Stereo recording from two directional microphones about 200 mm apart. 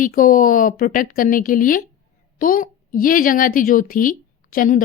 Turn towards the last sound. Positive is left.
turn(degrees=45)  # may be behind; listen again after turning